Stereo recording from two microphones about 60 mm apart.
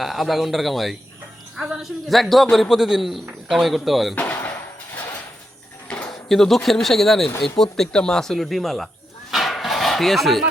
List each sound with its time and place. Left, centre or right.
0.0 s a man's voice: centre
4.1 s speech: left
4.4 s a sound: left
6.1 s a man's voice: centre
9.3 s dog: centre